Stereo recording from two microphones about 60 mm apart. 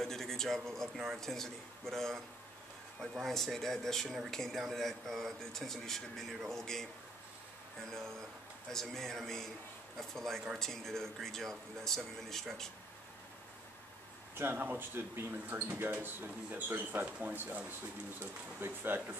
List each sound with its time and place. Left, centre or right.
0.0 s a sound: centre
0.9 s speech: centre
8.7 s speech: centre
14.3 s speech: right